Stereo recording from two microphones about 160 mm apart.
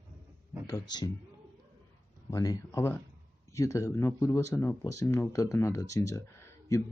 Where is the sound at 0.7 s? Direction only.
25° left (ahead or behind).